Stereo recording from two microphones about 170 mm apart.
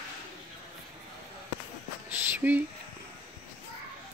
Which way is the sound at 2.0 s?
10° right (ahead or behind).